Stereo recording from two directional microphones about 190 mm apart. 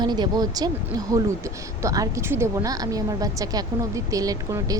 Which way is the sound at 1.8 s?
15° right (ahead or behind).